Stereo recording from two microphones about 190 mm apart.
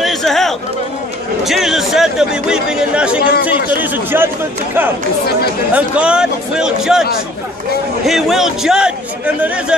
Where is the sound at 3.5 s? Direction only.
10° right (ahead or behind).